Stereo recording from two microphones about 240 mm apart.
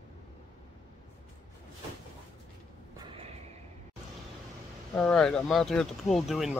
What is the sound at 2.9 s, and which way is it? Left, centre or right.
Neigh, right.